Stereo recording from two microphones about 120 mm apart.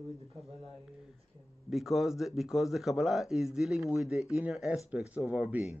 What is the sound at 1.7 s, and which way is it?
Speech, centre (ahead or behind).